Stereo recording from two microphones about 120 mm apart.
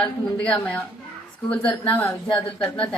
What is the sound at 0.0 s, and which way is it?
A woman's voice, 10° left (ahead or behind).